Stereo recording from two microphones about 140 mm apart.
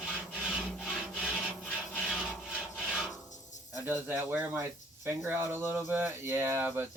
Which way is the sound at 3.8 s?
15° right (ahead or behind).